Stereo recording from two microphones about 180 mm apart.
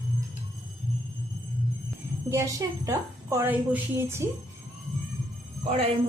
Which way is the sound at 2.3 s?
15° right (ahead or behind).